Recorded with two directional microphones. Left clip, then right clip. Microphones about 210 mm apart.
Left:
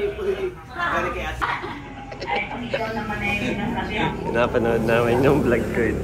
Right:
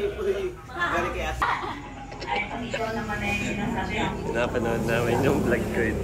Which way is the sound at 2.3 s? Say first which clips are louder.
Left 3 dB; 5° right (ahead or behind).